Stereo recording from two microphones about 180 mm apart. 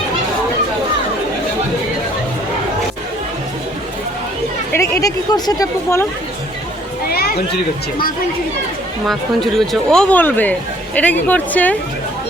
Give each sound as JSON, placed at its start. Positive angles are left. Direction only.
{"t": 4.7, "sound": "speech", "side_deg": 15}
{"t": 7.1, "sound": "speech", "side_deg": 60}
{"t": 9.0, "sound": "speech", "side_deg": 0}